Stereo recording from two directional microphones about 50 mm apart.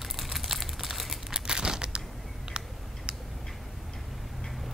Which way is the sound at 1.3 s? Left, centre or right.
Centre.